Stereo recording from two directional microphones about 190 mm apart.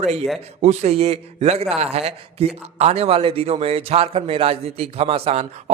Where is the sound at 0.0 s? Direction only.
35° right (ahead or behind).